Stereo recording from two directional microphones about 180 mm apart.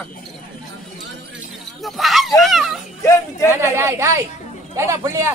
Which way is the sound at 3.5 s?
15° right (ahead or behind).